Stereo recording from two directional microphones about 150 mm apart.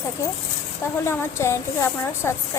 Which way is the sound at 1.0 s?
20° left (ahead or behind).